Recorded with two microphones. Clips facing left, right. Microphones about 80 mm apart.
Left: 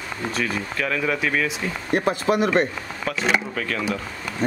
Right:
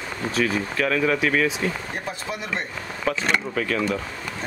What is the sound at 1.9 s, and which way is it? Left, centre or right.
Speech, left.